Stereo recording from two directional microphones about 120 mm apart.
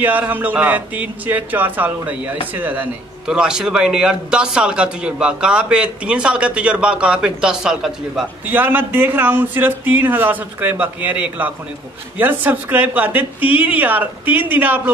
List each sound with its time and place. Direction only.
0.0 s a man's voice: 15° right (ahead or behind)
8.5 s a man's voice: 15° right (ahead or behind)